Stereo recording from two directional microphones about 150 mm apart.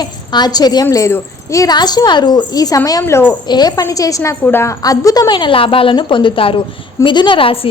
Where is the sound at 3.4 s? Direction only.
30° left (ahead or behind).